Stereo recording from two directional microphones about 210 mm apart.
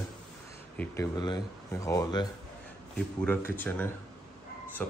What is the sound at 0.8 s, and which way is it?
Speech, 15° left (ahead or behind).